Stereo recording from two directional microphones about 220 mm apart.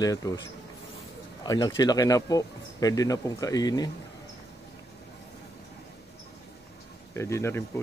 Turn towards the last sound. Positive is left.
turn(degrees=10)  # may be behind; listen again after turning